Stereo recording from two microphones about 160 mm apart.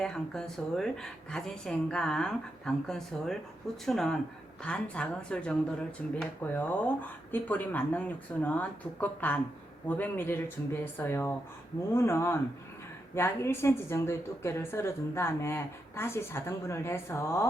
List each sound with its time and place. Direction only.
0.0 s a woman's voice: 5° left (ahead or behind)